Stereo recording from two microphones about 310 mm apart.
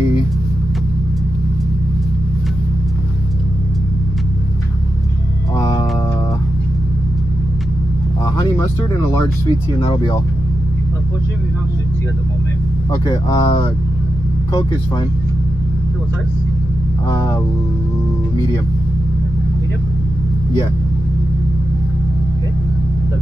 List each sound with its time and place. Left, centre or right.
9.8 s speech: centre
12.9 s speech: centre